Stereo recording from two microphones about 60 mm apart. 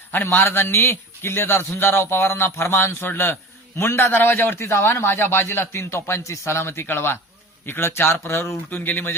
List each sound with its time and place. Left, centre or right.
0.1 s a man's voice: left
8.7 s speech: left